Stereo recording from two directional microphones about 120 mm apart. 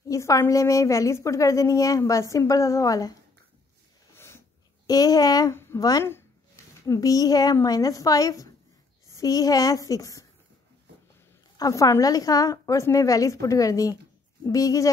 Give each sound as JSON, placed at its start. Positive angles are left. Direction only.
{"t": 0.1, "sound": "a woman's voice", "side_deg": 25}
{"t": 4.8, "sound": "a child's voice", "side_deg": 30}
{"t": 6.0, "sound": "a sound", "side_deg": 20}
{"t": 7.6, "sound": "a woman's voice", "side_deg": 30}
{"t": 11.5, "sound": "a woman's voice", "side_deg": 30}